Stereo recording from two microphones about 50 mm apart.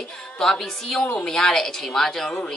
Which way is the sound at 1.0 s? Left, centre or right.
Left.